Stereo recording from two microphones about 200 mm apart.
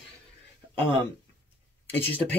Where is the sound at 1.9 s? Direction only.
10° left (ahead or behind).